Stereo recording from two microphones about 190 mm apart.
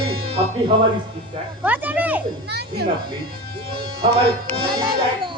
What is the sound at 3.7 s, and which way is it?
Speech, 30° right (ahead or behind).